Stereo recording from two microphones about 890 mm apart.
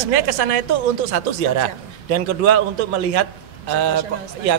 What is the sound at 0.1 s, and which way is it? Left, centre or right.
A man's voice, right.